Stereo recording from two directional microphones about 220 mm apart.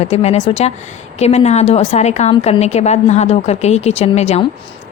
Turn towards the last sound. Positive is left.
turn(degrees=30)  # may be behind; listen again after turning